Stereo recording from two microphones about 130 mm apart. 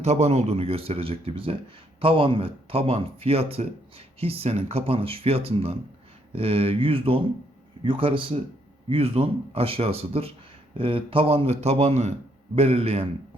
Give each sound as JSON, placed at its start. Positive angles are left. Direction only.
{"t": 0.0, "sound": "a man's voice", "side_deg": -60}